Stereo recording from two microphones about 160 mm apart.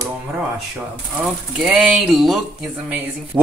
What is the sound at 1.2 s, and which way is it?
Speech, 5° right (ahead or behind).